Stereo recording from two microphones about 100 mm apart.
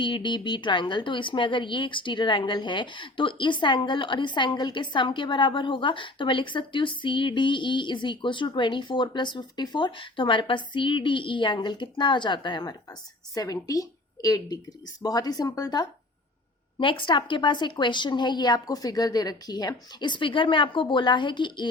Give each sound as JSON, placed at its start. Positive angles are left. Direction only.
{"t": 0.0, "sound": "a woman's voice", "side_deg": 55}
{"t": 13.3, "sound": "a woman's voice", "side_deg": 35}
{"t": 16.7, "sound": "a woman's voice", "side_deg": 55}